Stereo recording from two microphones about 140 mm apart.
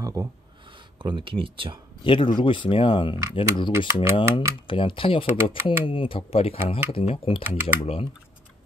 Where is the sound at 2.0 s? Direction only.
35° left (ahead or behind).